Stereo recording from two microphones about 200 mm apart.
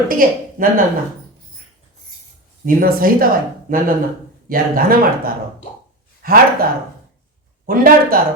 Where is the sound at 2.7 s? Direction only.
45° right (ahead or behind).